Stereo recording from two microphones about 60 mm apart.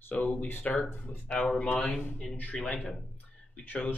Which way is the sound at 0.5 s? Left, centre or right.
Left.